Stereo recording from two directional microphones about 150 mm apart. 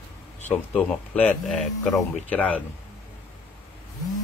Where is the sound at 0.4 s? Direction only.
10° left (ahead or behind).